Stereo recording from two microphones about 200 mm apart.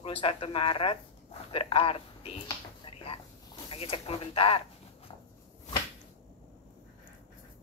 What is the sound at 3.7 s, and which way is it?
Speech, 30° left (ahead or behind).